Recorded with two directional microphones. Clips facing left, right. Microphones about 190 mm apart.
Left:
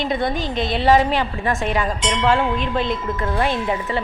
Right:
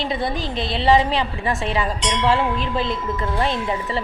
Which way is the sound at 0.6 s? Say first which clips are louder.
Left 5 dB; 30° right (ahead or behind).